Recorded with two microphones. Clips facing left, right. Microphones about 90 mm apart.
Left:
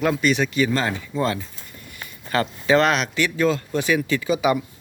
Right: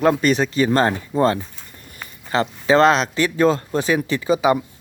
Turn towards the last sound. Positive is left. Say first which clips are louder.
# right 3 dB
turn(degrees=-30)  # may be behind; listen again after turning